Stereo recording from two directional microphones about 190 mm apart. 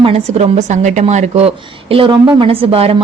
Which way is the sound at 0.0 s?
30° right (ahead or behind).